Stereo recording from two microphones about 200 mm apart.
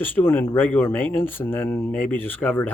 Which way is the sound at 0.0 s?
10° left (ahead or behind).